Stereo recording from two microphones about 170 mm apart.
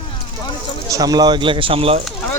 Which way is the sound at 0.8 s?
20° right (ahead or behind).